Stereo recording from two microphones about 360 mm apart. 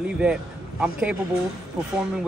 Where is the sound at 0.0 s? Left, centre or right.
Centre.